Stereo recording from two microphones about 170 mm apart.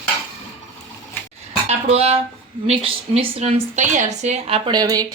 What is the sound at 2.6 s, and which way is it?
A woman's voice, 35° right (ahead or behind).